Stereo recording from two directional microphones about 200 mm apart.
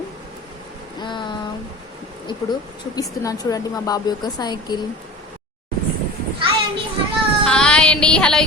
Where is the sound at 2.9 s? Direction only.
15° left (ahead or behind).